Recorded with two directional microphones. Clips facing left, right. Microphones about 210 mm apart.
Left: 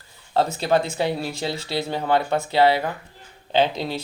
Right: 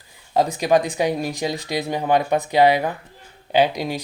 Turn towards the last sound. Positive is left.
turn(degrees=-15)  # may be behind; listen again after turning